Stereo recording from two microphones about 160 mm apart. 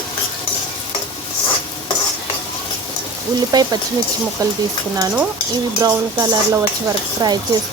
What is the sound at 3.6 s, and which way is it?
Speech, 25° right (ahead or behind).